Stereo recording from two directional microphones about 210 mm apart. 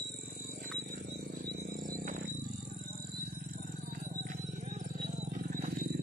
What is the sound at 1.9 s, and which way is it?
Wild animals, 40° right (ahead or behind).